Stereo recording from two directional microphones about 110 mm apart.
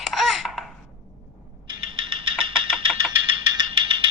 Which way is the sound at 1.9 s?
55° right (ahead or behind).